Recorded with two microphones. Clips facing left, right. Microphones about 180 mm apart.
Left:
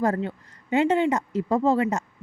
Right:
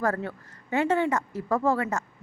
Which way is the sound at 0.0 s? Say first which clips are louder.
Left 3 dB; 20° left (ahead or behind).